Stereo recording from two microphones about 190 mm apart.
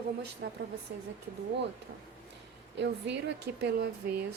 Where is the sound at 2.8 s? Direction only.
65° right (ahead or behind).